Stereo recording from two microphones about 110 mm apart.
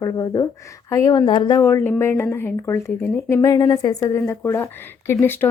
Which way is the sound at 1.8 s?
20° left (ahead or behind).